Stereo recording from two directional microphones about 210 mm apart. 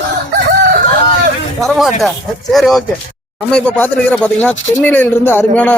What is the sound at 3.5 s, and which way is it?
Speech, 5° left (ahead or behind).